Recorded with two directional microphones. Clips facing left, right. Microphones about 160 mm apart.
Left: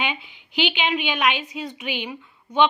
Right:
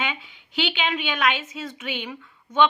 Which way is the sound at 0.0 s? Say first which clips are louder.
Left 2 dB; 15° left (ahead or behind).